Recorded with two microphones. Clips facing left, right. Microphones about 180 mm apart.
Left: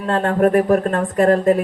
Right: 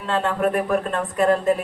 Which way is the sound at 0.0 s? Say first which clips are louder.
Left 5 dB; 50° left (ahead or behind).